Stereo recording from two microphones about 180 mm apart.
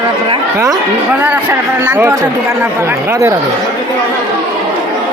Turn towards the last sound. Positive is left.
turn(degrees=-15)  # may be behind; listen again after turning